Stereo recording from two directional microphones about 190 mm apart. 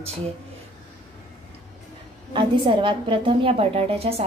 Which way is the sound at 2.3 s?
25° right (ahead or behind).